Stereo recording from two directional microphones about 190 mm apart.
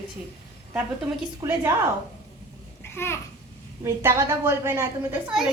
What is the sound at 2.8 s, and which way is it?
Babbling, 10° left (ahead or behind).